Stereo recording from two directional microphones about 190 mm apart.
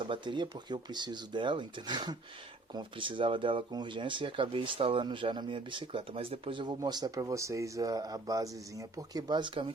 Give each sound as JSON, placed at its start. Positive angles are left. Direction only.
{"t": 0.0, "sound": "speech", "side_deg": -25}